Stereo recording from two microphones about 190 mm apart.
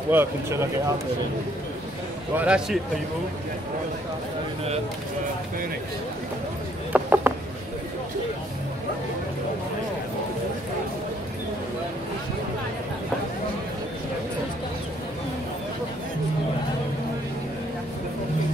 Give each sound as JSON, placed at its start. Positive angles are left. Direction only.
{"t": 0.1, "sound": "speech", "side_deg": -15}
{"t": 2.3, "sound": "a man's voice", "side_deg": -5}
{"t": 6.9, "sound": "a sound", "side_deg": -10}